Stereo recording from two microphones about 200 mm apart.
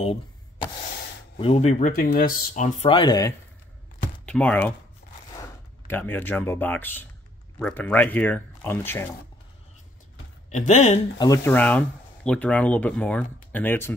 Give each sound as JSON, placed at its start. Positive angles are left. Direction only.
{"t": 0.0, "sound": "wood", "side_deg": 30}
{"t": 1.4, "sound": "speech", "side_deg": 30}
{"t": 4.3, "sound": "speech", "side_deg": 5}
{"t": 5.9, "sound": "speech", "side_deg": 10}
{"t": 10.5, "sound": "speech", "side_deg": 35}
{"t": 11.1, "sound": "speech", "side_deg": 15}